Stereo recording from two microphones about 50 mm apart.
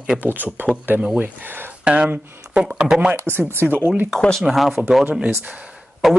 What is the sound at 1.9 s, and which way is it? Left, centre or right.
Speech, right.